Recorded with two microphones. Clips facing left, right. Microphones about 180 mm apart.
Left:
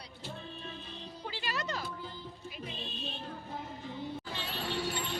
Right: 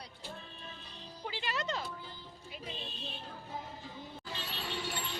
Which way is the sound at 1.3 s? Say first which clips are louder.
Right 1 dB; 20° right (ahead or behind).